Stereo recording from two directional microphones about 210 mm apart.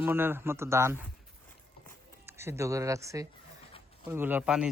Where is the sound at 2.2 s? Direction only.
10° right (ahead or behind).